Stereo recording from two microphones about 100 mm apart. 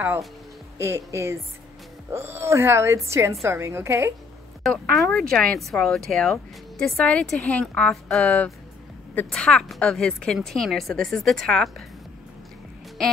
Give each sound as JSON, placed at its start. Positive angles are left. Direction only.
{"t": 0.7, "sound": "speech", "side_deg": -25}
{"t": 4.6, "sound": "a woman's voice", "side_deg": 5}